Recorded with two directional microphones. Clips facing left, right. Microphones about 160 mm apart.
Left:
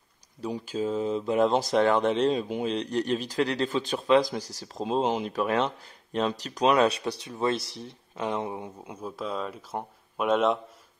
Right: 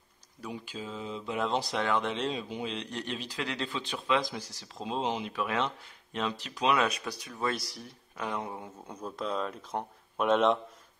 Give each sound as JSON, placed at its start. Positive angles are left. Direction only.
{"t": 0.4, "sound": "speech", "side_deg": 35}
{"t": 8.9, "sound": "speech", "side_deg": 5}